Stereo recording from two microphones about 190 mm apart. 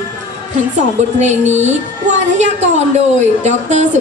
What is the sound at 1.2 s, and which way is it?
A woman's voice, 35° right (ahead or behind).